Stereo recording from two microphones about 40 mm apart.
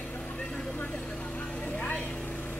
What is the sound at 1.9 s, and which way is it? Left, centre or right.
Vehicle, left.